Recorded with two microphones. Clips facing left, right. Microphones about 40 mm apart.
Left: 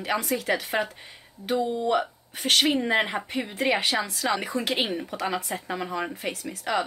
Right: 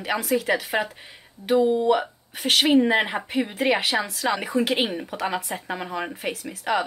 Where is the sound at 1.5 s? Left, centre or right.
Right.